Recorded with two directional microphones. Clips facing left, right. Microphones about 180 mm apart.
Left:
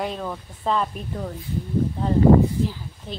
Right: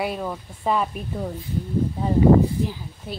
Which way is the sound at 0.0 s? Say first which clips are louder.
Right 1 dB; 10° right (ahead or behind).